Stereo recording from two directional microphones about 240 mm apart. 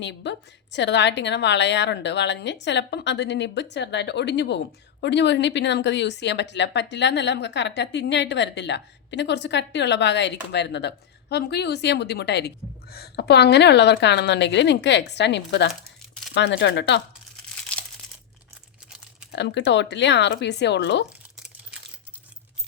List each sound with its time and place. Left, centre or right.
0.0 s a woman's voice: left
19.3 s a woman's voice: left
21.3 s crumpling: centre